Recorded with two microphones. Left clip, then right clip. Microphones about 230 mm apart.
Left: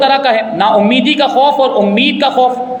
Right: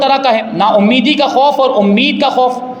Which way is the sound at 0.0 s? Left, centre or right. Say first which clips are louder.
Left 1 dB; right.